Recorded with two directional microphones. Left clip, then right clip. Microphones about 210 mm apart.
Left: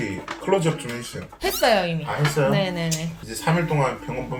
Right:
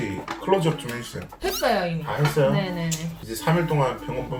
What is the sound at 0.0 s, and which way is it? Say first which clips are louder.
Speech: left 1 dB; 5° left (ahead or behind).